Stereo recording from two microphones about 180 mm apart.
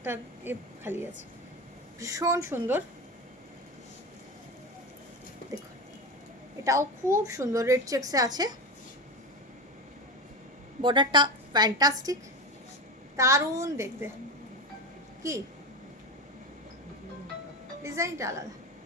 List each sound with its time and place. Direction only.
0.0 s a woman's voice: 10° right (ahead or behind)
6.7 s a woman's voice: 15° right (ahead or behind)
10.8 s a woman's voice: 25° right (ahead or behind)
13.1 s a woman's voice: 15° right (ahead or behind)
15.2 s a woman's voice: 15° right (ahead or behind)
17.8 s a woman's voice: 15° right (ahead or behind)